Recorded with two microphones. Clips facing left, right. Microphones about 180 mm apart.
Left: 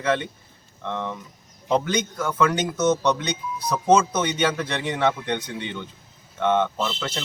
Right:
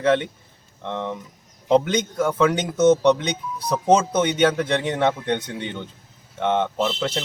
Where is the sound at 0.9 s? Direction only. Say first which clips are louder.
Right 2 dB; 20° right (ahead or behind).